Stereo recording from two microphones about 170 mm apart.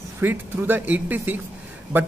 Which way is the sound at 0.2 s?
10° right (ahead or behind).